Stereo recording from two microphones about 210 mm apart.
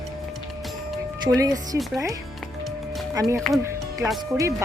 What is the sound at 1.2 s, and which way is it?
Speech, 15° right (ahead or behind).